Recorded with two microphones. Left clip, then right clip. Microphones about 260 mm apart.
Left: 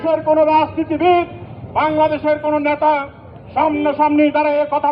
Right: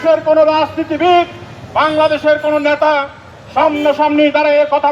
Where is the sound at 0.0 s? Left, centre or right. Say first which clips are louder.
Right 4 dB; right.